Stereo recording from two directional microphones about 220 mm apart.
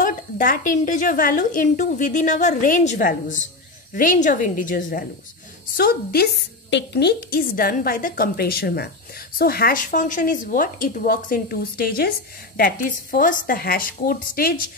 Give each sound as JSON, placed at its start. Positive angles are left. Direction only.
{"t": 0.0, "sound": "a woman's voice", "side_deg": 35}